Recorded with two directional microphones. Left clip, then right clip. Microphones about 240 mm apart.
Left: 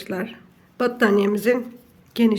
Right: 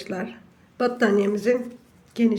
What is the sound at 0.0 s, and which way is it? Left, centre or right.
Speech, centre.